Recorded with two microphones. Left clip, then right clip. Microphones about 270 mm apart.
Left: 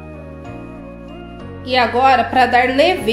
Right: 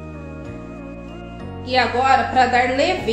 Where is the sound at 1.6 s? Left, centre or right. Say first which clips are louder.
Left 4 dB; left.